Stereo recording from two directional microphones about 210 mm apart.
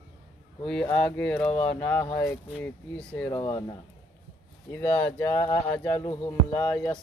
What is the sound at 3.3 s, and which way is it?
Speech, 20° left (ahead or behind).